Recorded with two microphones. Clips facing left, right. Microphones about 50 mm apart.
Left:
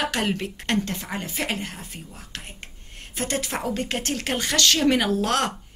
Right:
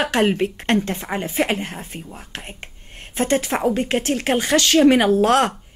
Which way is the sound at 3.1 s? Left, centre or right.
Right.